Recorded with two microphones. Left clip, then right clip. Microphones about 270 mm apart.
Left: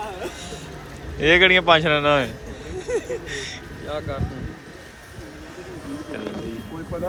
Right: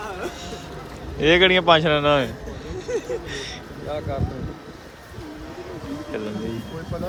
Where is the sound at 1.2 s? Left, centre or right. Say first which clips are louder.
Left 1 dB; centre.